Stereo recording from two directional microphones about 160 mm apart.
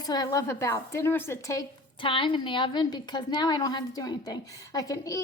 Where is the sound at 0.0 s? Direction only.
25° left (ahead or behind).